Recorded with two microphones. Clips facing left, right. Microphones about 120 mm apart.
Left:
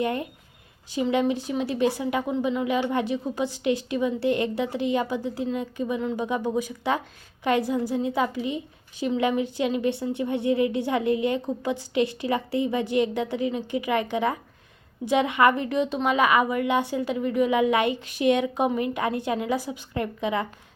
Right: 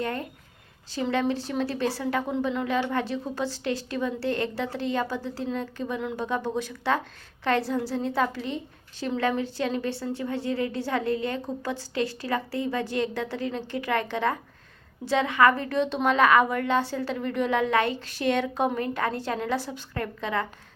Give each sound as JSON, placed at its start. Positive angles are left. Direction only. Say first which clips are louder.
{"t": 0.0, "sound": "a woman's voice", "louder": "left 4 dB", "side_deg": 15}